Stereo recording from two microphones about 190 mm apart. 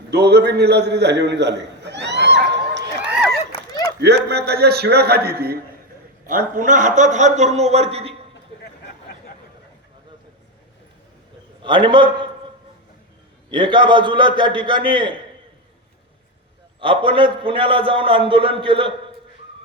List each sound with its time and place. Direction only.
0.1 s a sound: 60° right (ahead or behind)
3.0 s a sound: 5° right (ahead or behind)
4.0 s a man's voice: 60° right (ahead or behind); by 8.1 s 30° right (ahead or behind)
11.6 s a man's voice: 25° right (ahead or behind)
13.5 s a man's voice: 25° right (ahead or behind)
16.8 s a man's voice: 25° right (ahead or behind)